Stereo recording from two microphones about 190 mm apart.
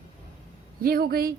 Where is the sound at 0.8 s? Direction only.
55° right (ahead or behind).